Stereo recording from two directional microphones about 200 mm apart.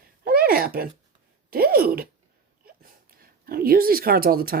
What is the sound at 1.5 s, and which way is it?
Speech, 50° right (ahead or behind).